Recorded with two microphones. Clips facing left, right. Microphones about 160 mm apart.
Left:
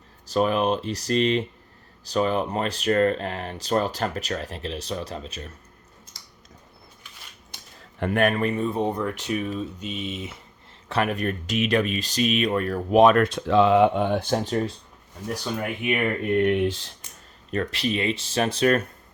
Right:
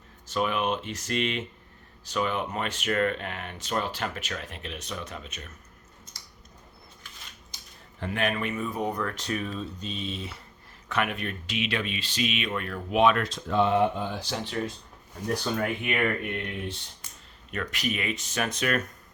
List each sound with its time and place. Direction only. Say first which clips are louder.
0.3 s speech: left 6 dB; 35° left (ahead or behind)
7.5 s speech: left 4 dB; 60° left (ahead or behind); by 9.0 s 30° left (ahead or behind)
9.0 s speech: left 4 dB; 15° left (ahead or behind)
10.8 s speech: left 5 dB; 35° left (ahead or behind)
13.2 s speech: left 6 dB; 75° left (ahead or behind); by 14.6 s 45° left (ahead or behind)
15.8 s speech: left 3 dB; 20° left (ahead or behind)
16.4 s speech: left 14 dB; 80° left
17.5 s speech: left 6 dB; 30° left (ahead or behind)